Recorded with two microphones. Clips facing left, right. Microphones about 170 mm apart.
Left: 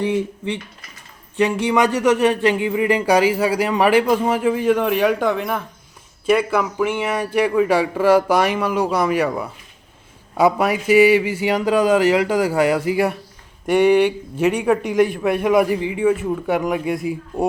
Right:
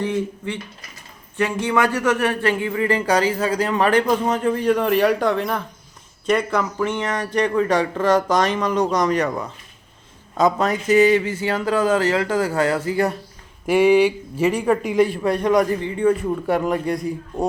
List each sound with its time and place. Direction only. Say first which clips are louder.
0.0 s speech: left 2 dB; 15° left (ahead or behind)
13.7 s a man's voice: even; centre (ahead or behind)